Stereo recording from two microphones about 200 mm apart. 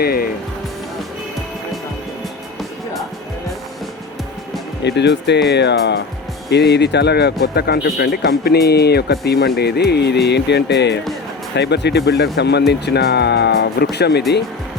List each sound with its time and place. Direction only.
0.0 s speech: 50° left (ahead or behind)
4.8 s speech: 60° left (ahead or behind)